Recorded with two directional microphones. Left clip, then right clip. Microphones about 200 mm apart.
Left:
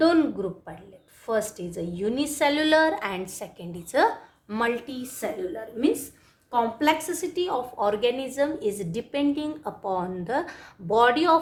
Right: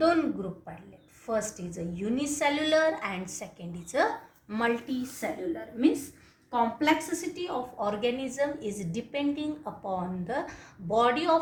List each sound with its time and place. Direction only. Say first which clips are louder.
0.0 s speech: left 4 dB; 40° left (ahead or behind)
1.3 s a woman's voice: left 4 dB; 40° left (ahead or behind)